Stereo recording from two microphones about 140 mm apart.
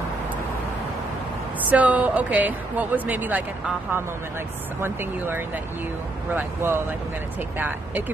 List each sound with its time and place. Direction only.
1.7 s a woman's voice: 10° right (ahead or behind)
6.3 s a woman's voice: 15° right (ahead or behind)